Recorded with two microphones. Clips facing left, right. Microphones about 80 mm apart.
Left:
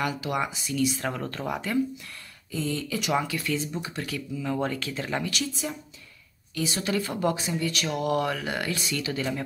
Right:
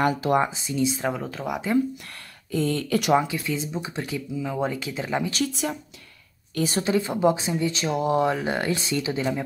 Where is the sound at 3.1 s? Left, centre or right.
Centre.